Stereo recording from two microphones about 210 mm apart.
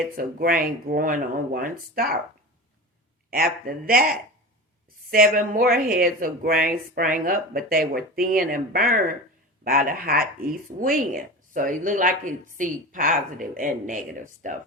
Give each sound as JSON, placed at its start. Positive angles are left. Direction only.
{"t": 0.2, "sound": "speech", "side_deg": -45}
{"t": 3.2, "sound": "speech", "side_deg": -45}